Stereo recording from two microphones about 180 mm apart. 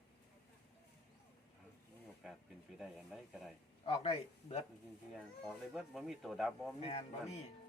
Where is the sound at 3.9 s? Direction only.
35° left (ahead or behind).